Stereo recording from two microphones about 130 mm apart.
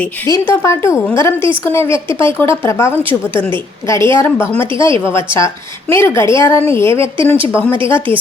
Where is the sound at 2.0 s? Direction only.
40° right (ahead or behind).